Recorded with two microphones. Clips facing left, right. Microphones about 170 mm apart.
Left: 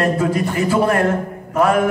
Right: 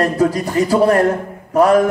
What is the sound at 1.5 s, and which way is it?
Mantra, 35° right (ahead or behind).